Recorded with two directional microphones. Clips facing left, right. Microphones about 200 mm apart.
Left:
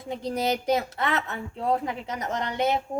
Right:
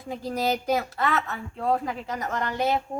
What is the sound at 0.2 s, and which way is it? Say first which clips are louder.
A woman's voice: even; 20° left (ahead or behind).